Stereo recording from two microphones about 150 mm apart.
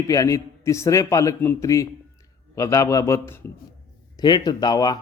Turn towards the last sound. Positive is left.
turn(degrees=25)  # may be behind; listen again after turning